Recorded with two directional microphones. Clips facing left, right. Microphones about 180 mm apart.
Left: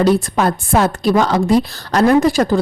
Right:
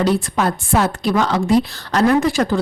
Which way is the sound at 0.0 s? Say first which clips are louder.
Left 3 dB; 40° left (ahead or behind).